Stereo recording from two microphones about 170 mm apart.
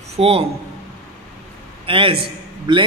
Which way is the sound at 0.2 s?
35° right (ahead or behind).